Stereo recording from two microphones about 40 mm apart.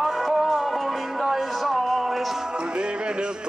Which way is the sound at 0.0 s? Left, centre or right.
Centre.